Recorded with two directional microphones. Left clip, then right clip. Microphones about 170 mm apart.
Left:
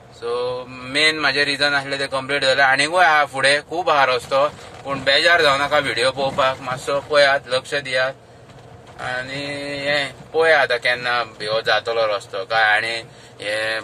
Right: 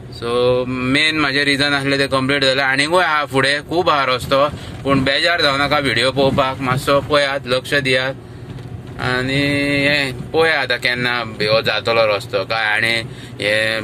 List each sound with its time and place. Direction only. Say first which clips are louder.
0.2 s speech: right 7 dB; 20° right (ahead or behind)